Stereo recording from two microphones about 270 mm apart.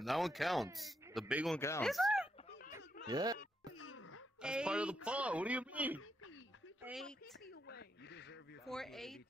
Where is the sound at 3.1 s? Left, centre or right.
Centre.